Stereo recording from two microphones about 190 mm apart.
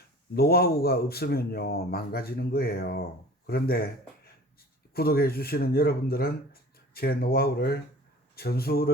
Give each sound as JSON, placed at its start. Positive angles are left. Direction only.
{"t": 0.3, "sound": "a man's voice", "side_deg": 55}
{"t": 4.9, "sound": "a man's voice", "side_deg": 55}